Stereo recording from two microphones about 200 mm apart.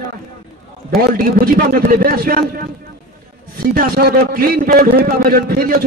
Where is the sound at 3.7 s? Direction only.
50° right (ahead or behind).